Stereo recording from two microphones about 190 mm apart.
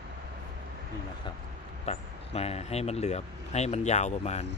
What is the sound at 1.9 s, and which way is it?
Speech, 35° left (ahead or behind).